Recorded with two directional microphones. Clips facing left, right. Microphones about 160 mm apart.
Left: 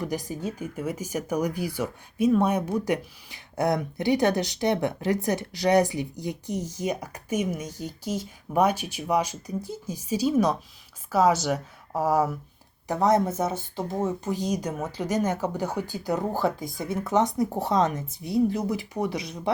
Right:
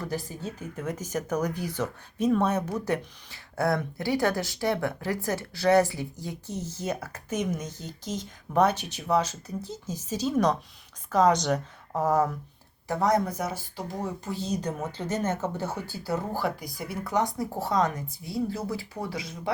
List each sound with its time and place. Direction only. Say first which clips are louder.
0.0 s speech: left 3 dB; 15° left (ahead or behind)
12.9 s speech: left 3 dB; 20° left (ahead or behind)